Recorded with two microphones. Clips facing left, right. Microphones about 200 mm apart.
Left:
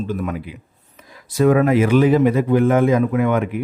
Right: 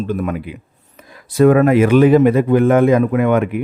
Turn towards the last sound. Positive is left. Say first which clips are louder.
# right 3 dB
turn(degrees=-60)  # may be behind; listen again after turning